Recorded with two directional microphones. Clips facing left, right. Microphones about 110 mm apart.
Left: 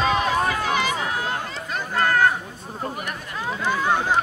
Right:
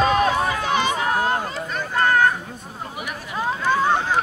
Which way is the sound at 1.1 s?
45° right (ahead or behind).